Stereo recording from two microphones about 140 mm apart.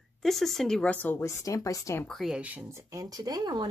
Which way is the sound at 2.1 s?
Centre (ahead or behind).